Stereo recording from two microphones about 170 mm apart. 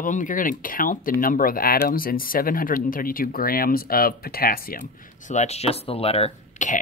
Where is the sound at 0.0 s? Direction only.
50° left (ahead or behind).